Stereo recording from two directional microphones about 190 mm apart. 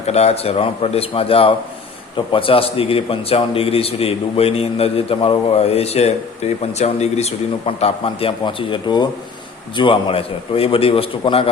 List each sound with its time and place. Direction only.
0.0 s a man's voice: 35° left (ahead or behind)